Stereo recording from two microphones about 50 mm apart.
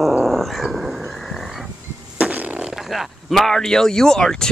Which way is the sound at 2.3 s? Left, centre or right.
Right.